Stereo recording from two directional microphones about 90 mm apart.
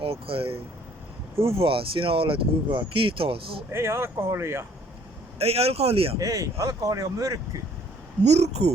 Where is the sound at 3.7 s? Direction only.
30° right (ahead or behind).